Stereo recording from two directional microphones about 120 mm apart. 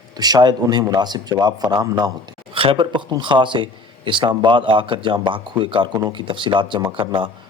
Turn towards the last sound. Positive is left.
turn(degrees=-40)  # may be behind; listen again after turning